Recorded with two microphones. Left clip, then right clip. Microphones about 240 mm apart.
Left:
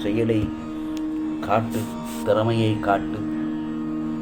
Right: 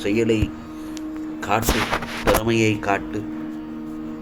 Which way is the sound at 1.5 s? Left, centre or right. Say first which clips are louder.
Even; right.